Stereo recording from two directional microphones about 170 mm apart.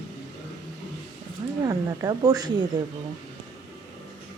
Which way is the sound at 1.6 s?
20° right (ahead or behind).